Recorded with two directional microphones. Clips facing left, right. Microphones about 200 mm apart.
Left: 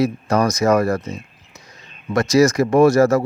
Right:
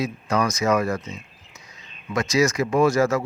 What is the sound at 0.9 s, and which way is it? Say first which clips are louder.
Speech: left 6 dB; 40° left (ahead or behind).